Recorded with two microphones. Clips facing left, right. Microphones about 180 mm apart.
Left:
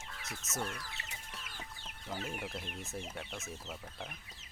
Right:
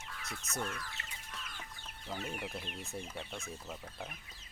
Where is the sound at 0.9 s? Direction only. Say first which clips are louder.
Even; 15° left (ahead or behind).